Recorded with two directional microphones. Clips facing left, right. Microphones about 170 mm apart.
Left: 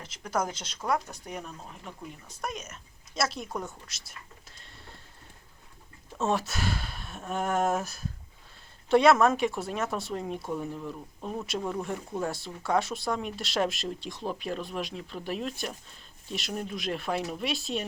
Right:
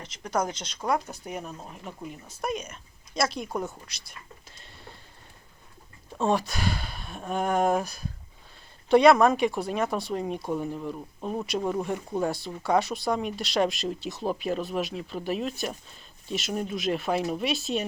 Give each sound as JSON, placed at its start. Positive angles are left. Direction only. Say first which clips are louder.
{"t": 0.0, "sound": "speech", "louder": "right 2 dB", "side_deg": 5}
{"t": 1.4, "sound": "speech", "louder": "right 3 dB", "side_deg": -20}
{"t": 2.2, "sound": "speech", "louder": "right 6 dB", "side_deg": -5}
{"t": 6.1, "sound": "speech", "louder": "right 3 dB", "side_deg": 5}
{"t": 11.6, "sound": "speech", "louder": "right 5 dB", "side_deg": -15}
{"t": 12.2, "sound": "speech", "louder": "right 4 dB", "side_deg": 0}